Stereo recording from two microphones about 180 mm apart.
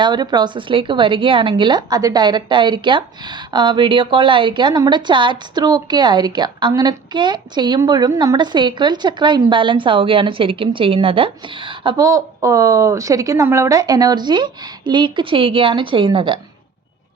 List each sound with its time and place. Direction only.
0.0 s a woman's voice: 25° right (ahead or behind)